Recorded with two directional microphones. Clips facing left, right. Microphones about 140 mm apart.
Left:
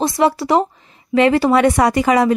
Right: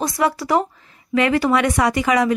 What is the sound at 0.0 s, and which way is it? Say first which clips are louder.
A woman's voice: left 4 dB; 25° left (ahead or behind).